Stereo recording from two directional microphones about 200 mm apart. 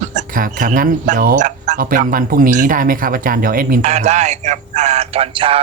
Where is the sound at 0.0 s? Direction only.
35° right (ahead or behind).